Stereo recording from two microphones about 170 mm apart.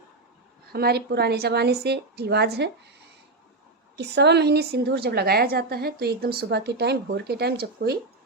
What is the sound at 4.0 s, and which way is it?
A woman's voice, 80° right.